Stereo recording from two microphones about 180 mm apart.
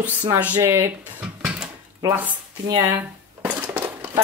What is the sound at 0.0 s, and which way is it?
Speech, 10° right (ahead or behind).